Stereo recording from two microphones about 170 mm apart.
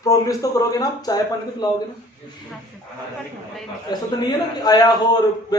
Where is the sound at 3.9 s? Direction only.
25° left (ahead or behind).